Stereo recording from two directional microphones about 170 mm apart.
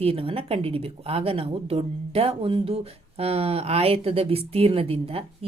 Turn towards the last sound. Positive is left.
turn(degrees=-35)  # may be behind; listen again after turning